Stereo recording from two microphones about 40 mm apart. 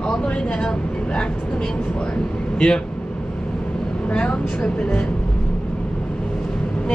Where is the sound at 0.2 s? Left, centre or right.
Centre.